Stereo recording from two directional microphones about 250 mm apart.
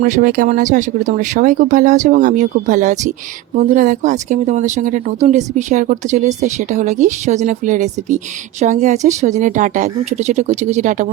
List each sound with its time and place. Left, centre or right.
0.0 s speech: right